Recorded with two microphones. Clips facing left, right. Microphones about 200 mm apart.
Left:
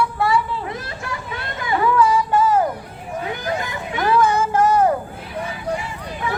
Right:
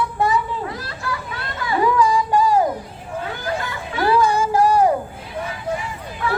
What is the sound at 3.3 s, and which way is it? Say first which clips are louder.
Vehicle: left 2 dB; 20° left (ahead or behind).